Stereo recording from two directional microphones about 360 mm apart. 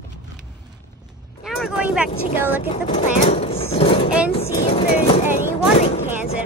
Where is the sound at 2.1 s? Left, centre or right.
Centre.